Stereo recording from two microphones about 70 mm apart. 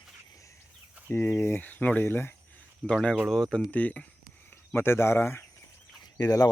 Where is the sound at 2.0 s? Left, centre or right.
Left.